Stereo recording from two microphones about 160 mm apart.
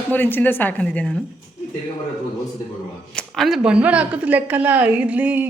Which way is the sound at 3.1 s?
Centre (ahead or behind).